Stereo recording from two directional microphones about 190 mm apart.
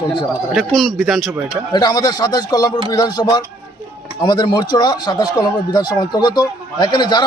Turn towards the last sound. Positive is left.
turn(degrees=20)  # may be behind; listen again after turning